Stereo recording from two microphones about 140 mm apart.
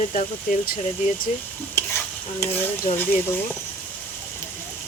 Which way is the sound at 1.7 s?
15° left (ahead or behind).